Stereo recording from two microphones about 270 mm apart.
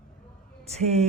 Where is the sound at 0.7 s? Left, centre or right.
Right.